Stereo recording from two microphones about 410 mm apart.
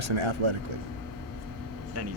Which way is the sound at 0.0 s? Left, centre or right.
Right.